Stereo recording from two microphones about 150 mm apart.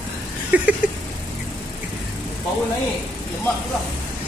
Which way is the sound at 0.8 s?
5° right (ahead or behind).